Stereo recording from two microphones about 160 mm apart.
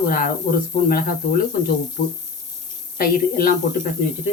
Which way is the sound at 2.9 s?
65° left (ahead or behind).